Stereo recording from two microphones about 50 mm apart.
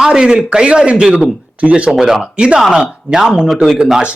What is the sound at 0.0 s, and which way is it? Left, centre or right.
A man's voice, centre.